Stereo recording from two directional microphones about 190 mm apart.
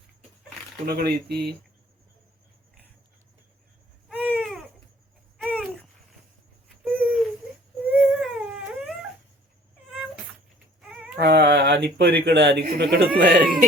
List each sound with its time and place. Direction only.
0.9 s speech: 55° right (ahead or behind)
4.1 s baby cry: 10° right (ahead or behind)
6.8 s baby cry: 10° right (ahead or behind)
7.9 s a sound: 5° right (ahead or behind)
10.8 s baby cry: 5° right (ahead or behind)
11.2 s speech: 60° right (ahead or behind)